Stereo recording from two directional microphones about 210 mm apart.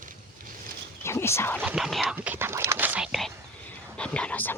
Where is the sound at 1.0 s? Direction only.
10° left (ahead or behind).